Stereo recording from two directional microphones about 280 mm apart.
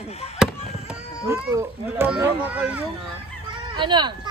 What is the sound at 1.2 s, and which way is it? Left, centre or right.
Speech, centre.